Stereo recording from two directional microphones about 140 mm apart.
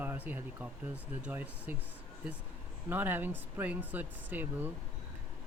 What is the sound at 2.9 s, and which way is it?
Speech, 15° right (ahead or behind).